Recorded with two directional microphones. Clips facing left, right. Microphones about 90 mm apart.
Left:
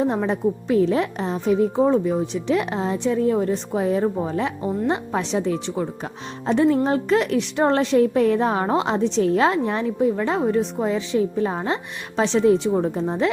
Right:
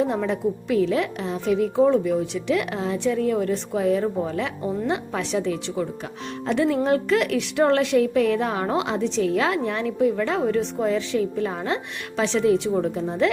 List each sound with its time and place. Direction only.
0.0 s a woman's voice: 30° left (ahead or behind)